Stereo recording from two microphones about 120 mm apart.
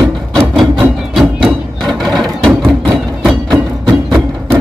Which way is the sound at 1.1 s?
Centre (ahead or behind).